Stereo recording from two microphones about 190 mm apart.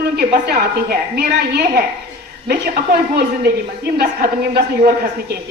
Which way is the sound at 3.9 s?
55° right (ahead or behind).